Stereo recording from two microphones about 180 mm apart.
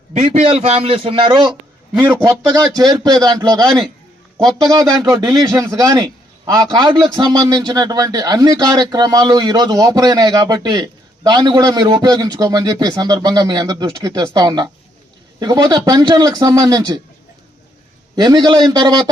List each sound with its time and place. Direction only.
0.1 s a man's voice: 35° right (ahead or behind)
18.2 s a man's voice: 20° right (ahead or behind)